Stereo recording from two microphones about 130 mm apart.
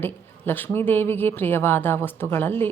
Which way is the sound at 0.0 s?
15° left (ahead or behind).